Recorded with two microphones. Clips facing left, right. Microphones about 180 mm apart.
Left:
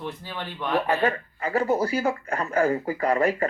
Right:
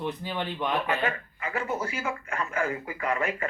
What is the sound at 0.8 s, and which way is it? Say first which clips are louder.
Speech: left 5 dB; 35° left (ahead or behind).